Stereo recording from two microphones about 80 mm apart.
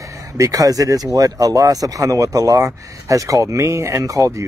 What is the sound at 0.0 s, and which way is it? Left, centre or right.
Speech, right.